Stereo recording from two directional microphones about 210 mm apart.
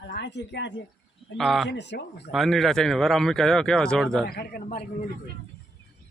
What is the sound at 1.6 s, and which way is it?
Speech, 55° left (ahead or behind).